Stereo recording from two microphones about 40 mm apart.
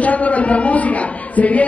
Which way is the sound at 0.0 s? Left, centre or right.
Left.